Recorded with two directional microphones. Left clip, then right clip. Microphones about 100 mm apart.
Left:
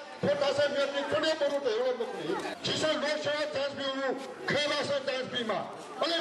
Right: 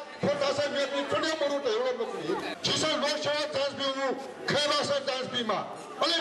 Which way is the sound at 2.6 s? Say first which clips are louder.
Right 2 dB; 20° right (ahead or behind).